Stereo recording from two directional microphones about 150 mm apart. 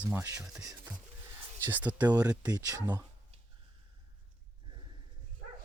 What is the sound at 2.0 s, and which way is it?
Speech, 25° right (ahead or behind).